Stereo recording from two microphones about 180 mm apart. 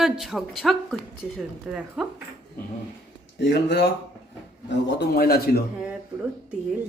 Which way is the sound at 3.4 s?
65° left (ahead or behind).